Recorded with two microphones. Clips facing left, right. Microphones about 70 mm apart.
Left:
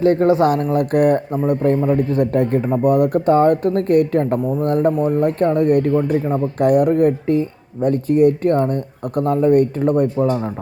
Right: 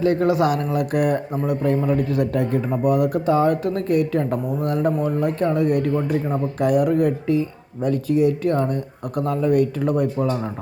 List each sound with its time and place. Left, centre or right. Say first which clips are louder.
0.0 s a man's voice: left 4 dB; left